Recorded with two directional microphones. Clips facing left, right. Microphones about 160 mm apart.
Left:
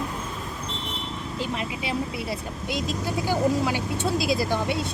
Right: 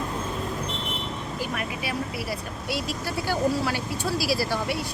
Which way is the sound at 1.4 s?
25° left (ahead or behind).